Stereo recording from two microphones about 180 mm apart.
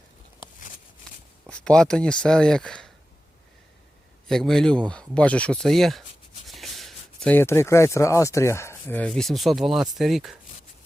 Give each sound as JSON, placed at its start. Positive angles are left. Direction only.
{"t": 1.5, "sound": "speech", "side_deg": 5}
{"t": 4.3, "sound": "speech", "side_deg": 5}